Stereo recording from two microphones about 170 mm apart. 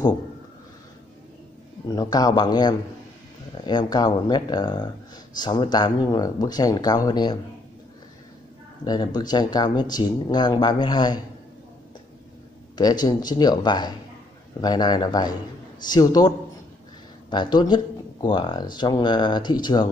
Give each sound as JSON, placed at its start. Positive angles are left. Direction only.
{"t": 1.9, "sound": "speech", "side_deg": 25}
{"t": 8.8, "sound": "speech", "side_deg": 25}
{"t": 12.7, "sound": "speech", "side_deg": 25}